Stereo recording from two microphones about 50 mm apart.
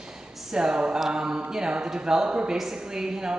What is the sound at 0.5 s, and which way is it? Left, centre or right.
Speech, centre.